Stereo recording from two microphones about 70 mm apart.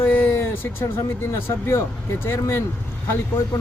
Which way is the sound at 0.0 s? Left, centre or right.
Left.